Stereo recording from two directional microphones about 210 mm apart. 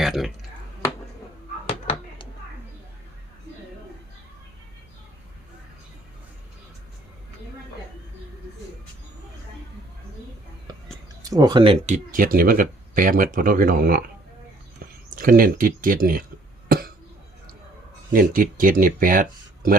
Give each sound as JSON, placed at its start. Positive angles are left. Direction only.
{"t": 0.0, "sound": "speech", "side_deg": 0}
{"t": 10.7, "sound": "whispering", "side_deg": -20}
{"t": 11.2, "sound": "speech", "side_deg": -15}
{"t": 12.1, "sound": "speech", "side_deg": -40}
{"t": 15.1, "sound": "speech", "side_deg": -40}
{"t": 16.6, "sound": "cough", "side_deg": -45}
{"t": 18.1, "sound": "speech", "side_deg": -40}